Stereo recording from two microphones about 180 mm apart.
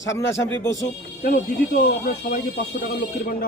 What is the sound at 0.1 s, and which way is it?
Speech, 15° left (ahead or behind).